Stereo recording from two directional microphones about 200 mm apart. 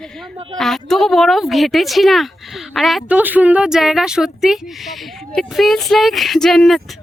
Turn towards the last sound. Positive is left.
turn(degrees=0)  # may be behind; listen again after turning